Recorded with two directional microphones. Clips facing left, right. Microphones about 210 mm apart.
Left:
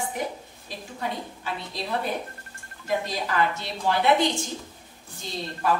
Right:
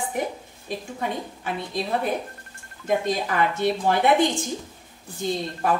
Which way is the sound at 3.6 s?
50° right (ahead or behind).